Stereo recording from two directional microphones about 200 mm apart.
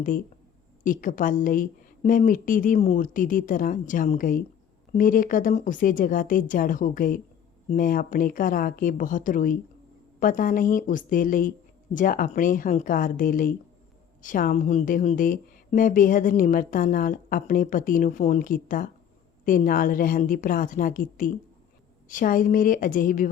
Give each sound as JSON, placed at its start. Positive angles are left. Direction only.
{"t": 0.9, "sound": "a woman's voice", "side_deg": 40}